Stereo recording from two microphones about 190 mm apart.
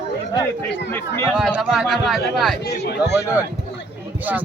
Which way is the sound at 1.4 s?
5° right (ahead or behind).